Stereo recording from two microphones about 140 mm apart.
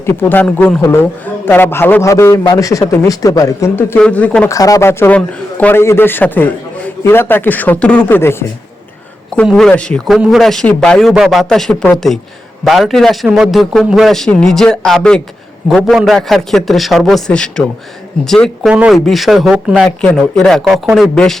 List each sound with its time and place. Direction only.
0.0 s a man's voice: 15° left (ahead or behind)
4.4 s a man's voice: 25° left (ahead or behind)
9.3 s a man's voice: 5° left (ahead or behind)
18.7 s a man's voice: 10° right (ahead or behind)
20.0 s a man's voice: 5° left (ahead or behind)